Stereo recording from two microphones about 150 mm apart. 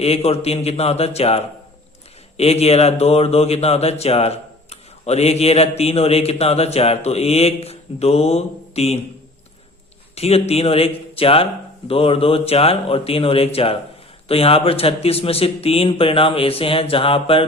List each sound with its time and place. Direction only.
0.0 s speech: 45° left (ahead or behind)
10.2 s a man's voice: 45° left (ahead or behind)